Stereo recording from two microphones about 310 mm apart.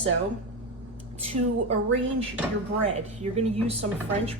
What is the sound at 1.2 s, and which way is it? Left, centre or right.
Speech, centre.